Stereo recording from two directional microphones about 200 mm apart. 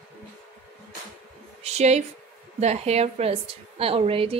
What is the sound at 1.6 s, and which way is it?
A woman's voice, 35° right (ahead or behind).